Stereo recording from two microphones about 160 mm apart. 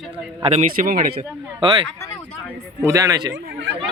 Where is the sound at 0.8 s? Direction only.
60° right (ahead or behind).